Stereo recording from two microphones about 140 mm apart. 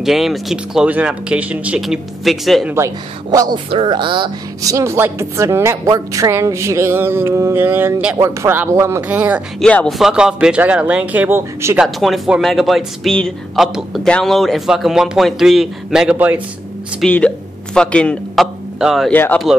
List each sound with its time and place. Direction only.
0.0 s speech: centre (ahead or behind)
3.3 s speech: 30° right (ahead or behind)
4.7 s a woman's voice: 20° right (ahead or behind)
9.6 s speech: 5° left (ahead or behind)
9.9 s speech: 5° right (ahead or behind)
11.8 s speech: centre (ahead or behind)
17.0 s a man's voice: 10° left (ahead or behind)
19.0 s speech: 10° left (ahead or behind)